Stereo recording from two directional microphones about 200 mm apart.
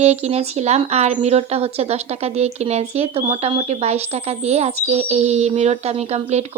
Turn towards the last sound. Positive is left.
turn(degrees=-35)  # may be behind; listen again after turning